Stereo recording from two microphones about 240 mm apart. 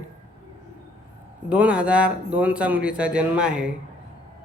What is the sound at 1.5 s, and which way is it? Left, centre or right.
Speech, centre.